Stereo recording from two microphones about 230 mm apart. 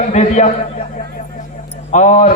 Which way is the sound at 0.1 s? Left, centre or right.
Left.